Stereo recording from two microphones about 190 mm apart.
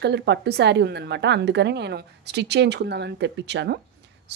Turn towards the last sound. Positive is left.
turn(degrees=-65)  # may be behind; listen again after turning